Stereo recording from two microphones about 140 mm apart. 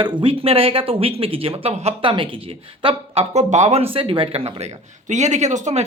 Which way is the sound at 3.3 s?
55° right (ahead or behind).